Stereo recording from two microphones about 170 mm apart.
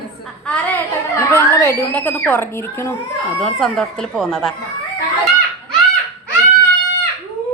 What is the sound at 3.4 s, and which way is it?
Speech, 5° left (ahead or behind).